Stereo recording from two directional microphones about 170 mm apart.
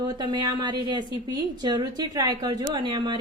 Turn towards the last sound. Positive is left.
turn(degrees=-30)  # may be behind; listen again after turning